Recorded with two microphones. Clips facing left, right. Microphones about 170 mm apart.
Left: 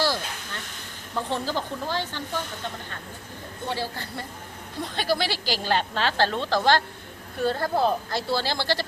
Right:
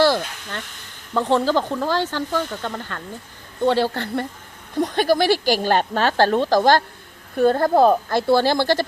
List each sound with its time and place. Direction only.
0.0 s a sound: 60° right (ahead or behind)
1.1 s speech: 90° right
3.7 s a woman's voice: 70° right (ahead or behind)
4.8 s speech: 45° right (ahead or behind)